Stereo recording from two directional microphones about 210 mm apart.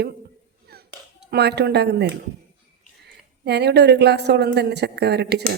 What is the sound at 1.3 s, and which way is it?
A woman's voice, 50° right (ahead or behind).